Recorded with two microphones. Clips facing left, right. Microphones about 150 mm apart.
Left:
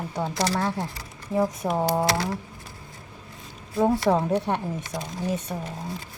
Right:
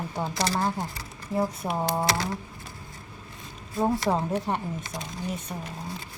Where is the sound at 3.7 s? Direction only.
75° left (ahead or behind).